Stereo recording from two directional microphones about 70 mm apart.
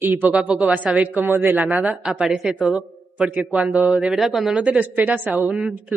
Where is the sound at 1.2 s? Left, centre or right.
Right.